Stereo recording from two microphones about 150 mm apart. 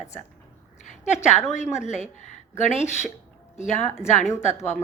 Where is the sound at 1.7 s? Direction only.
50° left (ahead or behind).